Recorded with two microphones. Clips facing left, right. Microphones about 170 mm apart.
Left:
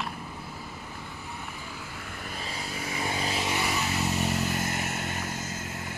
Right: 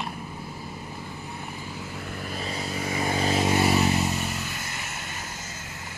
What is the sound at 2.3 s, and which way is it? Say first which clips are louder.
Vehicle: right 5 dB; 40° right (ahead or behind).